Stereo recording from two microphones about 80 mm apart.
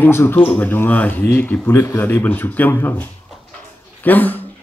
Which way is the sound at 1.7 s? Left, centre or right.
Left.